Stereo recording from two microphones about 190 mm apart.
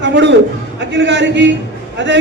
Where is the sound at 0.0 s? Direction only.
70° right (ahead or behind).